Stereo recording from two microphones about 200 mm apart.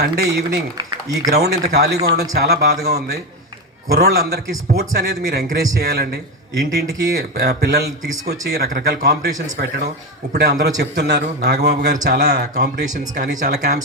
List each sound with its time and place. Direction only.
0.0 s a man's voice: 50° right (ahead or behind)
0.8 s speech: 20° right (ahead or behind)
1.3 s a man's voice: 50° right (ahead or behind)